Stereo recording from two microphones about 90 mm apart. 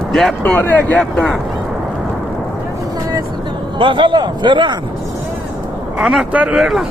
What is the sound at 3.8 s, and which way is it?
Speech, 60° right (ahead or behind).